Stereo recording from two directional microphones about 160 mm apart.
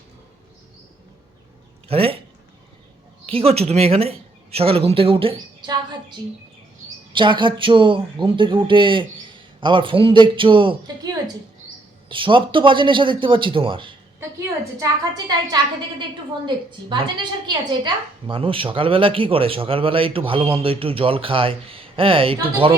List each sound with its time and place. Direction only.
1.9 s speech: 35° right (ahead or behind)
3.2 s a woman's voice: 35° right (ahead or behind)
14.2 s a woman's voice: 20° right (ahead or behind)
17.4 s a woman's voice: 30° right (ahead or behind)